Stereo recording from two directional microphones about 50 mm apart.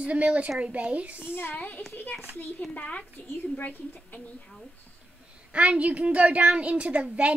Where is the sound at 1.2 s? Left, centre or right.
Left.